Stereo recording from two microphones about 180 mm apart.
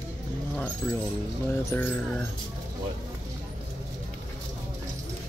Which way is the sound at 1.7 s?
10° left (ahead or behind).